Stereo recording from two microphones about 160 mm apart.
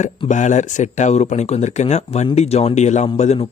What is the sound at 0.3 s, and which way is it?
Speech, 50° left (ahead or behind).